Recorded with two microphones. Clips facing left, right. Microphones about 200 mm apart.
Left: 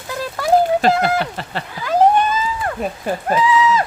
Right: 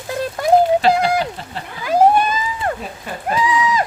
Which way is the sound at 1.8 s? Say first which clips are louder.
Right 1 dB; 10° right (ahead or behind).